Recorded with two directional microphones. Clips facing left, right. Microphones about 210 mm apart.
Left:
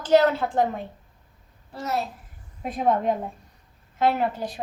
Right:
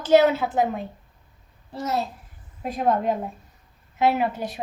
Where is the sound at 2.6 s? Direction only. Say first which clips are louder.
Even; centre (ahead or behind).